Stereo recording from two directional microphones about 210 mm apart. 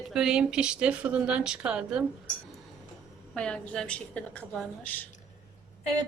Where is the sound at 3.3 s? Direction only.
5° left (ahead or behind).